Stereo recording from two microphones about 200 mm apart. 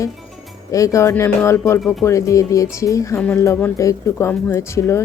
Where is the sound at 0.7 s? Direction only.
15° left (ahead or behind).